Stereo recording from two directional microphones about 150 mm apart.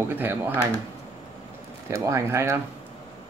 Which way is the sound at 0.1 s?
15° right (ahead or behind).